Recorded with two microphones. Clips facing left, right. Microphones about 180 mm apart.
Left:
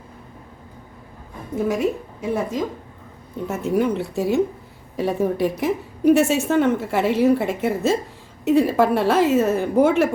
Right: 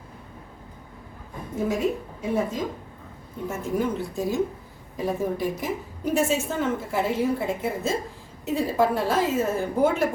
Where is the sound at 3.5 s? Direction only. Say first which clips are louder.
Left 6 dB; 70° left (ahead or behind).